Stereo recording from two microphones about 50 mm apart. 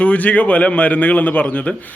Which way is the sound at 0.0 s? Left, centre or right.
Left.